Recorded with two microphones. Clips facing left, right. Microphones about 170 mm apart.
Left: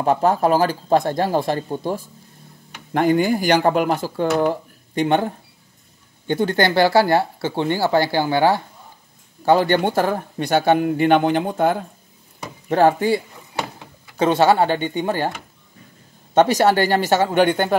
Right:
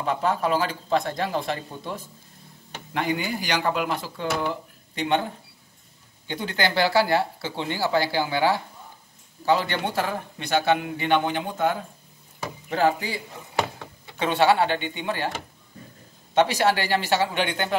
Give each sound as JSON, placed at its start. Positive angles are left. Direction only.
{"t": 0.0, "sound": "speech", "side_deg": 45}
{"t": 6.2, "sound": "speech", "side_deg": 50}
{"t": 14.1, "sound": "speech", "side_deg": 40}
{"t": 16.3, "sound": "speech", "side_deg": 45}